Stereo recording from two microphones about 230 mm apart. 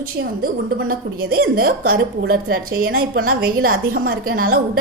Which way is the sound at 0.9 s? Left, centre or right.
Right.